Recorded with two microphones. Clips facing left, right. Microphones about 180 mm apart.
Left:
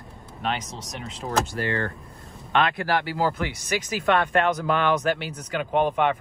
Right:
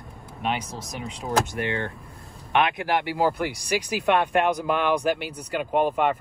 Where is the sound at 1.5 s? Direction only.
20° right (ahead or behind).